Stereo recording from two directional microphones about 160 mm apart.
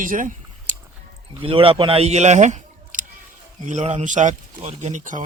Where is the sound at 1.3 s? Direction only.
35° right (ahead or behind); by 5.2 s 50° right (ahead or behind).